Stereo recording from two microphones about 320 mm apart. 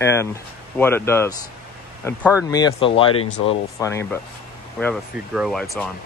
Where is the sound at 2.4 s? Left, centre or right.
Centre.